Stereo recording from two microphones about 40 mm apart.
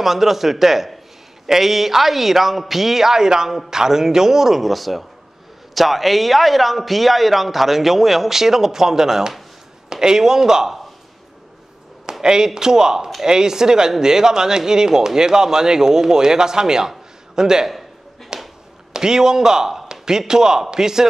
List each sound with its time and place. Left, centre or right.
0.0 s a man's voice: centre
12.1 s speech: centre
18.3 s a sound: right
18.9 s speech: centre